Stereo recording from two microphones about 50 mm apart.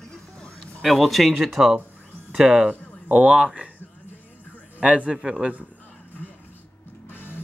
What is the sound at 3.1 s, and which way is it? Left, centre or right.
Speech, right.